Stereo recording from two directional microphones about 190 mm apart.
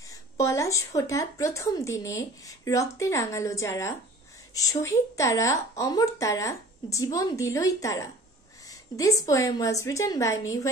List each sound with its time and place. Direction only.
0.1 s a woman's voice: 15° left (ahead or behind)